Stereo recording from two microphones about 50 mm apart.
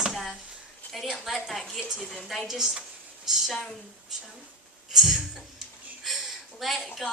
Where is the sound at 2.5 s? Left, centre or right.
Centre.